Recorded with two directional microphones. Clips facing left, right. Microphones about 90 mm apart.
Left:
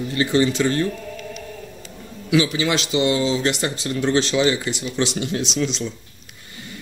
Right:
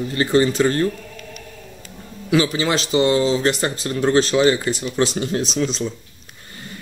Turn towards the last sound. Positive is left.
turn(degrees=-40)  # may be behind; listen again after turning